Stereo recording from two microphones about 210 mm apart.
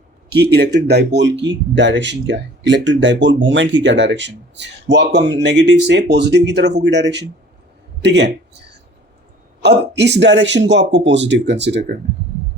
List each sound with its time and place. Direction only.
0.3 s speech: 50° right (ahead or behind)
9.6 s speech: 55° right (ahead or behind)